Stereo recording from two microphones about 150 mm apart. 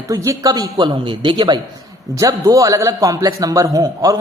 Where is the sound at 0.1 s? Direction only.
25° right (ahead or behind).